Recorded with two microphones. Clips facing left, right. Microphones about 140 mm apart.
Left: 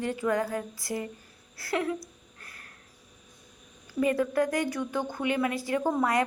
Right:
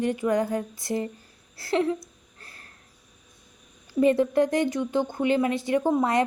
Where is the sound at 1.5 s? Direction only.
25° right (ahead or behind).